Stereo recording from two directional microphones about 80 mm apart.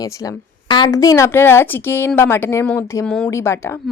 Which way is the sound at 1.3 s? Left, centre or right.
Left.